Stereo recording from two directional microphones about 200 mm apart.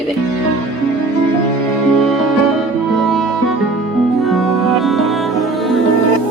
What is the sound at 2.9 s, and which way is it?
Music, centre (ahead or behind).